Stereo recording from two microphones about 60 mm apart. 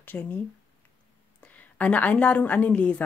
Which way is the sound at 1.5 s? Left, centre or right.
Left.